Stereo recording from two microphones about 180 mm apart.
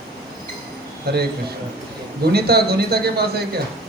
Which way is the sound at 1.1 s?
65° right (ahead or behind).